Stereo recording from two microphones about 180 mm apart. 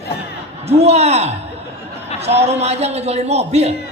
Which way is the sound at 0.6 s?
35° right (ahead or behind).